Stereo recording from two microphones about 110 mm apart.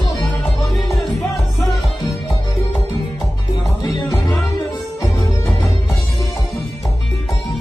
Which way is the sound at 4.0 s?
30° left (ahead or behind).